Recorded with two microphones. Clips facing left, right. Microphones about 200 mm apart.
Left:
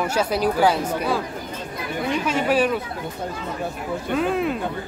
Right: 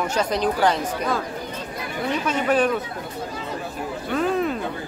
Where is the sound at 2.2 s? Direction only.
10° left (ahead or behind).